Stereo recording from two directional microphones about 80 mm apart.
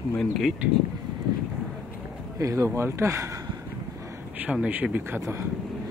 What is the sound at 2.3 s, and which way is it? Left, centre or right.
Speech, right.